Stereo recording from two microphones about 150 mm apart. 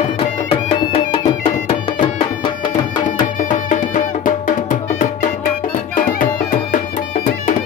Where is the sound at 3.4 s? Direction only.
55° left (ahead or behind).